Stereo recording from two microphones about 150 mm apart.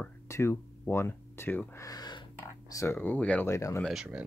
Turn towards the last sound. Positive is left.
turn(degrees=-5)  # may be behind; listen again after turning